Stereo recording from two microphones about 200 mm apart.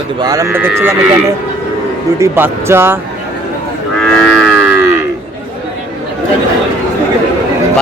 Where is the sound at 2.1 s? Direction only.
10° right (ahead or behind).